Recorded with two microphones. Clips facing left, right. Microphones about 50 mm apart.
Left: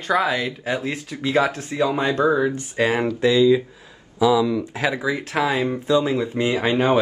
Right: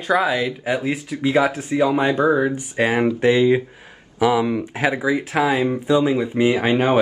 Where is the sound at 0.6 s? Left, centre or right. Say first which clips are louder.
Right 3 dB; centre.